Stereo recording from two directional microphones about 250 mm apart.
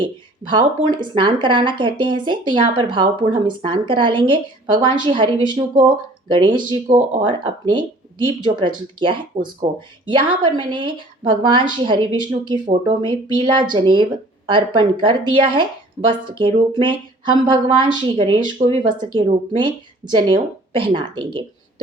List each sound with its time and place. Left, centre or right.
0.0 s speech: centre